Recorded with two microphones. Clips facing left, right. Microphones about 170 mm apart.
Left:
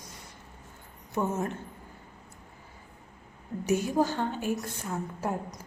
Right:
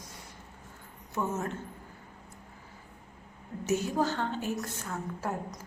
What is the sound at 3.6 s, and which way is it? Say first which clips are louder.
A woman's voice: left 3 dB; 15° left (ahead or behind).